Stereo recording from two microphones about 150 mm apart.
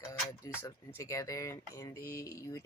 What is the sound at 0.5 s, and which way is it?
Speech, 25° left (ahead or behind).